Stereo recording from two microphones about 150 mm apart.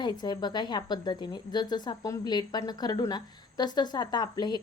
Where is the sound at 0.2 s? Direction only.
30° left (ahead or behind).